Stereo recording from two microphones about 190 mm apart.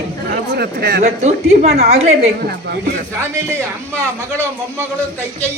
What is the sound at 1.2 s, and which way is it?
A woman's voice, 35° right (ahead or behind).